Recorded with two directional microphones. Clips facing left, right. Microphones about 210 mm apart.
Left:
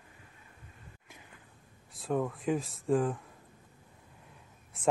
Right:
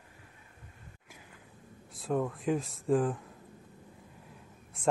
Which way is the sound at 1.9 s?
Centre (ahead or behind).